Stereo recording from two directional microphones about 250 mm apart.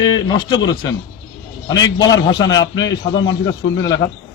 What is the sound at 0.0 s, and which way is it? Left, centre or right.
Speech, centre.